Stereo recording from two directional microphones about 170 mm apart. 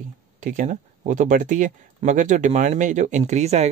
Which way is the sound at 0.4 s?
50° right (ahead or behind).